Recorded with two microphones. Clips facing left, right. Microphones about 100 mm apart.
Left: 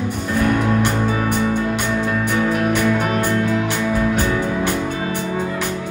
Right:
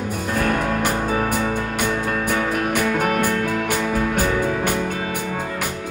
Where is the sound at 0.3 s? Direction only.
45° right (ahead or behind).